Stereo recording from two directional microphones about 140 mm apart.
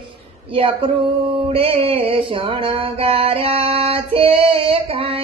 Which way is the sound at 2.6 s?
40° right (ahead or behind).